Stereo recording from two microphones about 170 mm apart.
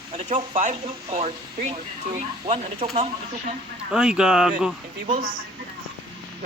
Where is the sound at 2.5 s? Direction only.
40° right (ahead or behind).